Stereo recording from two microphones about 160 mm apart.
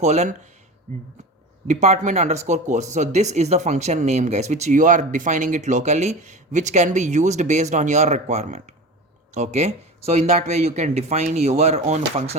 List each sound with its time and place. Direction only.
0.0 s speech: 45° right (ahead or behind)
1.6 s speech: 45° right (ahead or behind)